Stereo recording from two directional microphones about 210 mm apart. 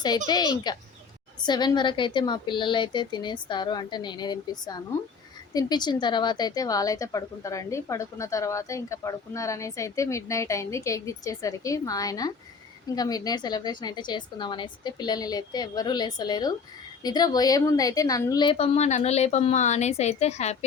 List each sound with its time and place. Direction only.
0.3 s a woman's voice: 20° left (ahead or behind)